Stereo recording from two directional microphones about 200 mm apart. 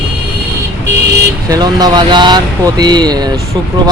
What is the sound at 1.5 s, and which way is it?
Speech, 20° right (ahead or behind).